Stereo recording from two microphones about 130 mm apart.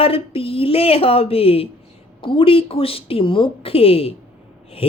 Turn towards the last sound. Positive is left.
turn(degrees=50)  # may be behind; listen again after turning